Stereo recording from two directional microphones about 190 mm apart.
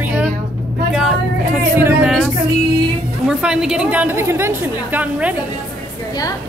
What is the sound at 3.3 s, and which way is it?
A woman's voice, 5° right (ahead or behind).